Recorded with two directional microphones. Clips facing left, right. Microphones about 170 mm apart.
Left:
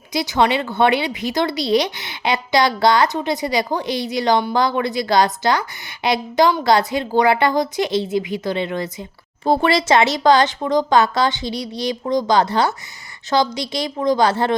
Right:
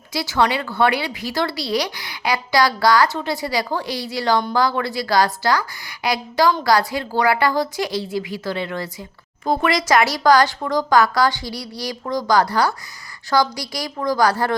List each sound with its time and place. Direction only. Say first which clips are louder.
0.1 s a woman's voice: left 2 dB; 20° left (ahead or behind)